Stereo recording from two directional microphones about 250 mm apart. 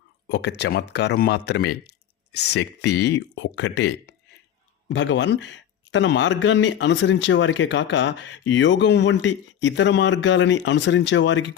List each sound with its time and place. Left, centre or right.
0.3 s a man's voice: left